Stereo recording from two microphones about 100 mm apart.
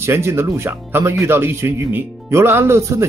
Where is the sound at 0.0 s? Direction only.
25° right (ahead or behind).